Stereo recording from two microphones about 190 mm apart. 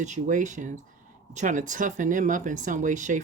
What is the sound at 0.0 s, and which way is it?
Speech, 40° right (ahead or behind).